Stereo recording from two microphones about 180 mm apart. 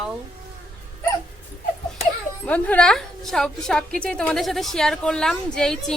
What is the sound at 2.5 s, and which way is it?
A woman's voice, 10° left (ahead or behind).